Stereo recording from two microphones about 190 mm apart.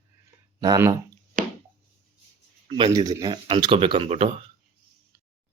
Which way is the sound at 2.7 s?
25° right (ahead or behind).